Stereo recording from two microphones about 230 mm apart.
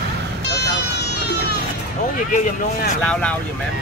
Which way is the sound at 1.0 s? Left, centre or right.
Left.